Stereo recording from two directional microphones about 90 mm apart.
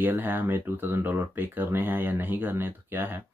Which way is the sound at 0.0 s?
20° right (ahead or behind).